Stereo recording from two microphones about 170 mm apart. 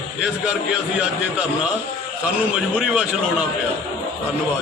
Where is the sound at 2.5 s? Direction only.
5° right (ahead or behind).